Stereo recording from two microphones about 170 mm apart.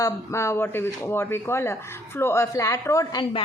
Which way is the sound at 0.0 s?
15° left (ahead or behind).